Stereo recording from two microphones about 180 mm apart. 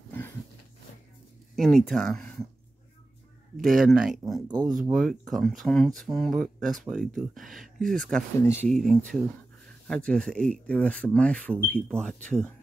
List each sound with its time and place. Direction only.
1.5 s a sound: centre (ahead or behind)
1.9 s speech: centre (ahead or behind)
3.5 s speech: centre (ahead or behind)
4.5 s speech: 20° right (ahead or behind)
4.9 s speech: centre (ahead or behind)
8.4 s speech: 15° left (ahead or behind)
8.6 s speech: 5° left (ahead or behind)